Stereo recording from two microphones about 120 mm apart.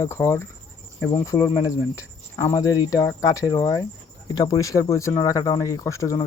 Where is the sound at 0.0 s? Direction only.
25° left (ahead or behind).